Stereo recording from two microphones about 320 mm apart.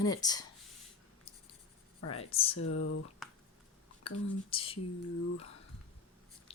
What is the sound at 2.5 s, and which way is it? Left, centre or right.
Speech, left.